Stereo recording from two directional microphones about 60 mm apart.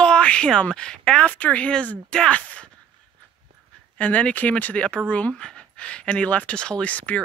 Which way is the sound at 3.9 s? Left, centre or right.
Left.